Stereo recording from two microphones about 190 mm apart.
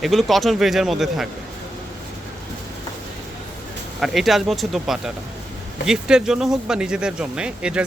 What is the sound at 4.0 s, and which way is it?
Speech, centre (ahead or behind).